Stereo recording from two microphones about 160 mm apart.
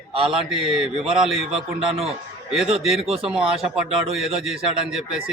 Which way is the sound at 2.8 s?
Centre (ahead or behind).